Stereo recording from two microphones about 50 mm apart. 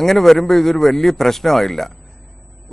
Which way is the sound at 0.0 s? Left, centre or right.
Centre.